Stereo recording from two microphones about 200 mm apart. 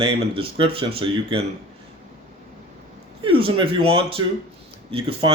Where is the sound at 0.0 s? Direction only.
25° right (ahead or behind).